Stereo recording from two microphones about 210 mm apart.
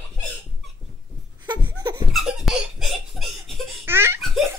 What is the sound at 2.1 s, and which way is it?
Laughter, centre (ahead or behind).